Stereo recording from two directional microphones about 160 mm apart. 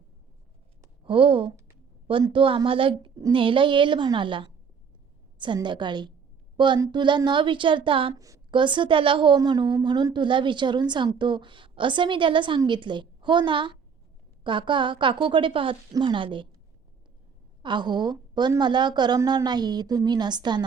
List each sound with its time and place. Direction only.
1.0 s a woman's voice: 35° right (ahead or behind)
8.1 s a woman's voice: 20° right (ahead or behind)
17.6 s a woman's voice: 30° right (ahead or behind)